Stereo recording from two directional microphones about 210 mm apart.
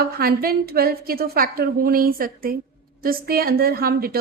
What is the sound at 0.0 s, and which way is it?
A woman's voice, 45° right (ahead or behind).